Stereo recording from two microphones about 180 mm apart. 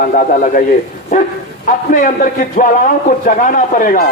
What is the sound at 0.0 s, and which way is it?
Speech, 50° left (ahead or behind).